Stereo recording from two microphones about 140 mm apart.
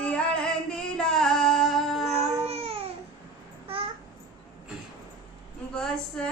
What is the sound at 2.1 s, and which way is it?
Babbling, 50° right (ahead or behind).